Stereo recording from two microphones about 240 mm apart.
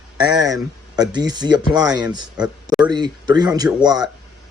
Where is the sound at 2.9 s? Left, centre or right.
Centre.